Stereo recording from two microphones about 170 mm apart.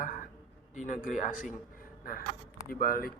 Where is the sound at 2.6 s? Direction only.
55° left (ahead or behind).